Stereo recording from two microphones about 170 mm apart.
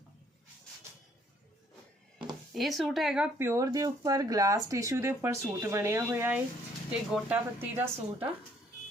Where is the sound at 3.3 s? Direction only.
15° right (ahead or behind).